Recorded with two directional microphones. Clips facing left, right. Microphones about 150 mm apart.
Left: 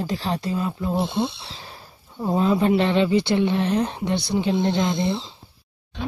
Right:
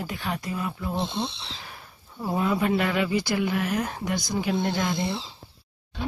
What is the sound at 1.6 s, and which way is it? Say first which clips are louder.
Speech: left 2 dB; 25° left (ahead or behind).